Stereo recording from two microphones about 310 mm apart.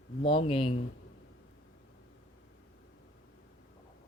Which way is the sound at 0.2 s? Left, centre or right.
Centre.